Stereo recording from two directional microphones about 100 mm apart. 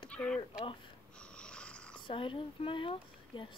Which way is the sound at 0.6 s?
55° left (ahead or behind).